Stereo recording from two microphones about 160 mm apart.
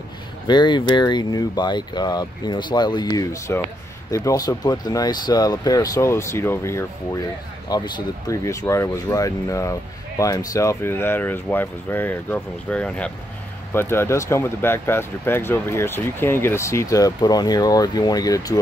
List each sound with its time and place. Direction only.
0.5 s speech: 30° left (ahead or behind)